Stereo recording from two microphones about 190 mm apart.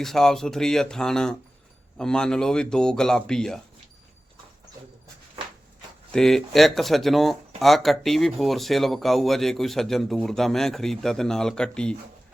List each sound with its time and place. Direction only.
0.0 s speech: centre (ahead or behind)
5.4 s a sound: 25° right (ahead or behind)
6.1 s speech: centre (ahead or behind)